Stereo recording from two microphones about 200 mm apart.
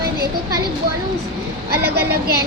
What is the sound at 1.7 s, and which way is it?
Speech, 50° right (ahead or behind).